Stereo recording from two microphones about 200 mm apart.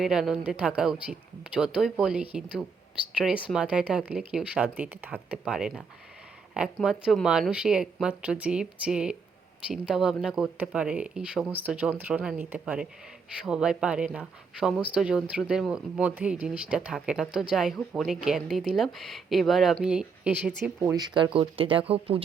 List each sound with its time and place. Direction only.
0.0 s speech: 5° right (ahead or behind)
21.3 s speech: 25° right (ahead or behind)